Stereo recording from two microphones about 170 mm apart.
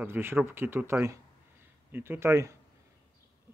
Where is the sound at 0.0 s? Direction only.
15° right (ahead or behind).